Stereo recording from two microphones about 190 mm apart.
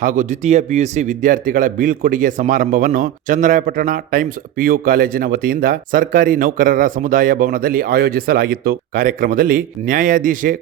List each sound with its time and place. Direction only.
0.0 s speech: 45° right (ahead or behind)